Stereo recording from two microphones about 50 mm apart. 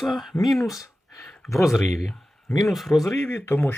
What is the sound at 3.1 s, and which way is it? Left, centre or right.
Speech, left.